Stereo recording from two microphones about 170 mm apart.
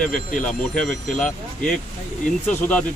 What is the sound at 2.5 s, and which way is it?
Speech, 10° left (ahead or behind).